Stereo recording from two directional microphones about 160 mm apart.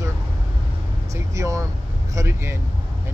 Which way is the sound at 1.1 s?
20° right (ahead or behind).